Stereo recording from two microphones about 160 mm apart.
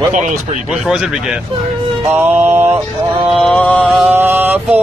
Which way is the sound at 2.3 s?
40° right (ahead or behind).